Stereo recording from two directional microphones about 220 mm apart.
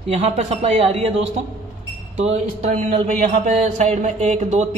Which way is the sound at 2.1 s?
30° right (ahead or behind).